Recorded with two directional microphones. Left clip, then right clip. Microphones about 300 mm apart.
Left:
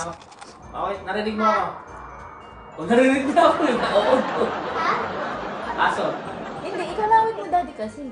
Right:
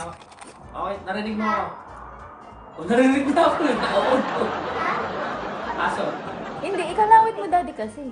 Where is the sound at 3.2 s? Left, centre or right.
Centre.